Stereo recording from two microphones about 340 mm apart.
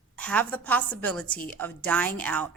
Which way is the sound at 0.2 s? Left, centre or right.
Centre.